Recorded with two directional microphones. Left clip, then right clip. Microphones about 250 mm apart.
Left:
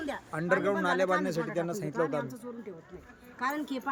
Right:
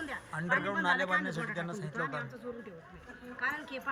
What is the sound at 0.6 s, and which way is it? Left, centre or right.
Speech, left.